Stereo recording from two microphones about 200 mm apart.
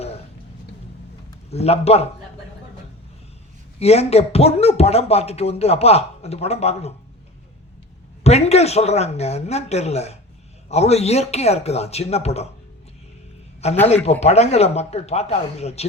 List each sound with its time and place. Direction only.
1.5 s speech: 30° left (ahead or behind)
3.8 s speech: 30° left (ahead or behind)
8.2 s speech: 30° left (ahead or behind)
13.8 s speech: 30° left (ahead or behind)